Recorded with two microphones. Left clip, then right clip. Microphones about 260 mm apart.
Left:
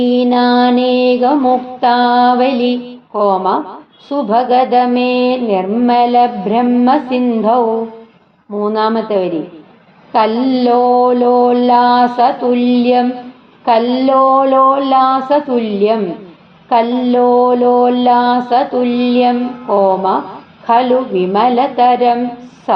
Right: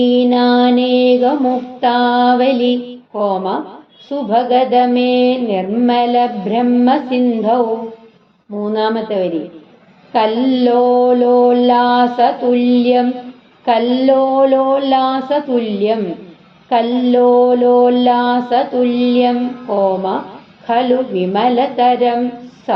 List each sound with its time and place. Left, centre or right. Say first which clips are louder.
0.0 s mantra: even; left
8.7 s mantra: left 2 dB; left
20.7 s mantra: left 3 dB; left